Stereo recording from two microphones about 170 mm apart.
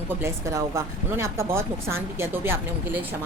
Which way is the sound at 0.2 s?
15° right (ahead or behind).